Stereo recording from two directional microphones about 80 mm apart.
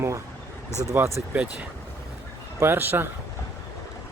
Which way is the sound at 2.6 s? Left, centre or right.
Right.